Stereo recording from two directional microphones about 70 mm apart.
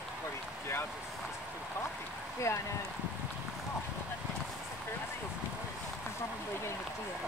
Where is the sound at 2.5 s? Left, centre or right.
Left.